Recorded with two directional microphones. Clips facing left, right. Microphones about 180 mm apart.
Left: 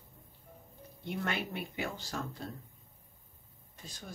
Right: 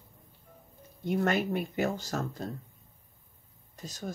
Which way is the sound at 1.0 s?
45° right (ahead or behind).